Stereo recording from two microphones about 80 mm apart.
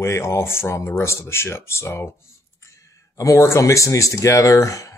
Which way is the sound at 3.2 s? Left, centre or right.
Left.